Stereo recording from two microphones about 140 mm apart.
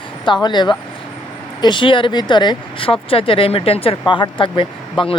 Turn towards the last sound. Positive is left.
turn(degrees=35)  # may be behind; listen again after turning